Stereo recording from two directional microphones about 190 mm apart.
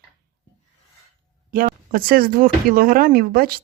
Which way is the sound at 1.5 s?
50° right (ahead or behind).